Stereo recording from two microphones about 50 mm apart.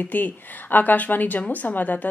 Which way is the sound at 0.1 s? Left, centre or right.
Left.